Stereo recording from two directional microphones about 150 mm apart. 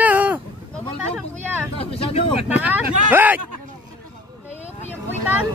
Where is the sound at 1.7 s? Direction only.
40° left (ahead or behind).